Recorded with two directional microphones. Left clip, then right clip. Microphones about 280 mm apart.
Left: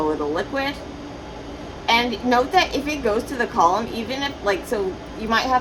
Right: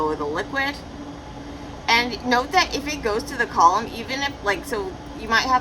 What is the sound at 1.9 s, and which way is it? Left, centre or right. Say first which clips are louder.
A woman's voice: left 1 dB; centre.